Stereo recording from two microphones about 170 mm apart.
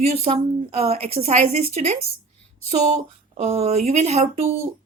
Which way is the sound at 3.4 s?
40° right (ahead or behind).